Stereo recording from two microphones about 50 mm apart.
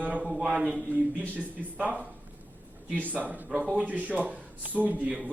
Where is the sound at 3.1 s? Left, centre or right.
Right.